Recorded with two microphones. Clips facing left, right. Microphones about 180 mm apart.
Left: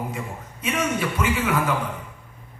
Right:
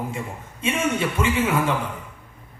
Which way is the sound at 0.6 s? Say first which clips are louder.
Right 2 dB; 25° right (ahead or behind).